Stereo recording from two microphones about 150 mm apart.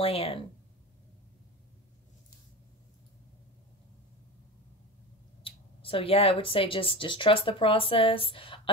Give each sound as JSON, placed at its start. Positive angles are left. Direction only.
{"t": 0.0, "sound": "speech", "side_deg": 40}
{"t": 5.4, "sound": "speech", "side_deg": 40}